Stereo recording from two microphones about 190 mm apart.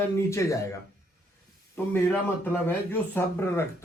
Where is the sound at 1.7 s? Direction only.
10° left (ahead or behind).